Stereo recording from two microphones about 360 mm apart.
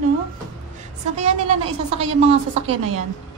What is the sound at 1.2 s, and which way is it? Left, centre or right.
Speech, centre.